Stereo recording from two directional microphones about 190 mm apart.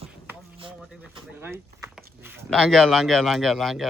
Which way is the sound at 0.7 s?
5° right (ahead or behind).